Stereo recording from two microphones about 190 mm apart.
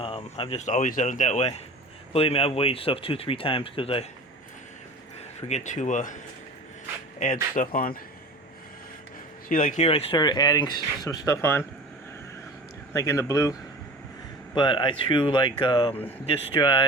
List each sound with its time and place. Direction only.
0.0 s speech: 30° left (ahead or behind)
5.5 s speech: 40° left (ahead or behind)
7.5 s speech: 45° left (ahead or behind)
9.5 s speech: 45° left (ahead or behind); by 11.6 s 15° left (ahead or behind)
12.9 s speech: 15° left (ahead or behind)